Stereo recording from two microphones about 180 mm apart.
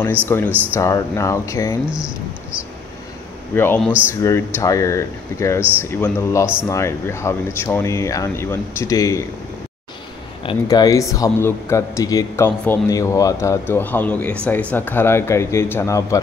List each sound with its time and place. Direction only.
0.3 s a man's voice: 10° left (ahead or behind)
1.9 s speech: 5° right (ahead or behind)
3.5 s a man's voice: 10° left (ahead or behind)
10.4 s a man's voice: 20° left (ahead or behind)